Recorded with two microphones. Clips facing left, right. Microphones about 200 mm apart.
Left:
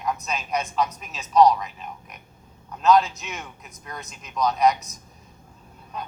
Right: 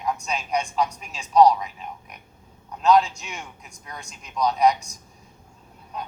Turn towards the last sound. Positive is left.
turn(degrees=-15)  # may be behind; listen again after turning